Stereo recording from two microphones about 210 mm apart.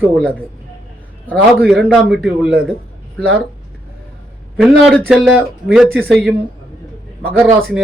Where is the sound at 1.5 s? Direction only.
Centre (ahead or behind).